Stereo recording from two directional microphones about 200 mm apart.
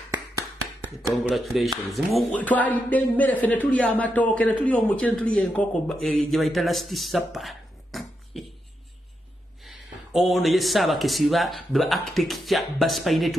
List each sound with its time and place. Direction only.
0.7 s a man's voice: centre (ahead or behind)
9.7 s a man's voice: centre (ahead or behind)